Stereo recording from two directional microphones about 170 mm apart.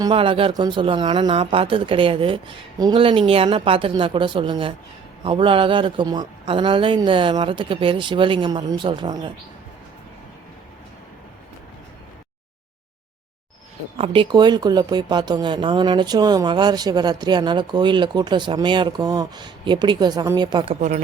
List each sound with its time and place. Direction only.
0.0 s speech: 30° right (ahead or behind)
13.9 s speech: 35° right (ahead or behind)